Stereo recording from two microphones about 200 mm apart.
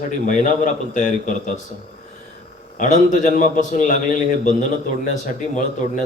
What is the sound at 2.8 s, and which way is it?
Speech, 40° left (ahead or behind).